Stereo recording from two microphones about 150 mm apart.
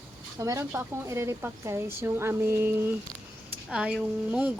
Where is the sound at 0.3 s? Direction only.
20° right (ahead or behind).